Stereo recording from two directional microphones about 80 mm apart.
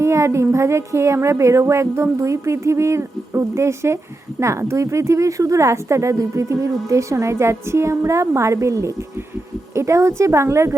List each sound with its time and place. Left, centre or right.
0.0 s speech: right